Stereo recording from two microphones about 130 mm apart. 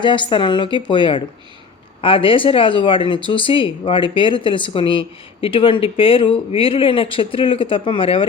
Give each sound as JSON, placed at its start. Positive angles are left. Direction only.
{"t": 0.0, "sound": "a woman's voice", "side_deg": 40}